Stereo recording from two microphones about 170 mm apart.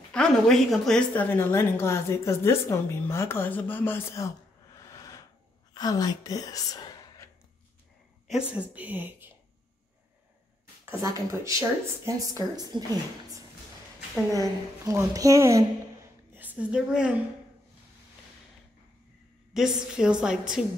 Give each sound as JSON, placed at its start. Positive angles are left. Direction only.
{"t": 0.1, "sound": "a woman's voice", "side_deg": 5}
{"t": 4.9, "sound": "a sound", "side_deg": 20}
{"t": 5.7, "sound": "speech", "side_deg": 25}
{"t": 8.3, "sound": "a woman's voice", "side_deg": -5}
{"t": 10.9, "sound": "speech", "side_deg": -20}
{"t": 14.4, "sound": "a woman's voice", "side_deg": -20}
{"t": 19.5, "sound": "a woman's voice", "side_deg": -5}